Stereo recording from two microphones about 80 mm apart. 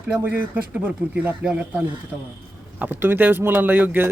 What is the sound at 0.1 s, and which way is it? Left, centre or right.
Speech, centre.